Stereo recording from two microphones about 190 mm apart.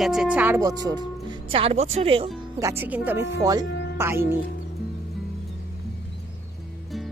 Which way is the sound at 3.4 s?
20° right (ahead or behind).